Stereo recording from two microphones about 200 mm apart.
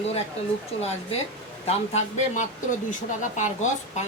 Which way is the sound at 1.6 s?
30° left (ahead or behind).